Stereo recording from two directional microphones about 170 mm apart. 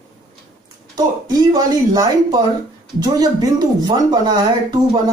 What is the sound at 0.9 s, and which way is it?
Speech, 20° right (ahead or behind).